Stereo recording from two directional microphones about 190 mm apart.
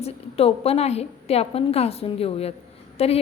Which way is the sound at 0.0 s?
30° left (ahead or behind).